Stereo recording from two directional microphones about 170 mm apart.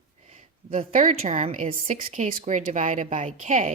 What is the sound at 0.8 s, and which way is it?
Speech, 50° right (ahead or behind).